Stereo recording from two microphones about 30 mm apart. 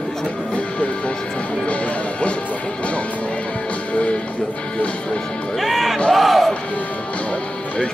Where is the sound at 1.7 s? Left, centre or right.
Left.